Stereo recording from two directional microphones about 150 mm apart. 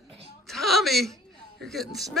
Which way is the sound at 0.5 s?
Centre (ahead or behind).